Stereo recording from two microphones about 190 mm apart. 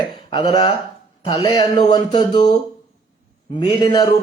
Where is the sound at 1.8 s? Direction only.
25° left (ahead or behind).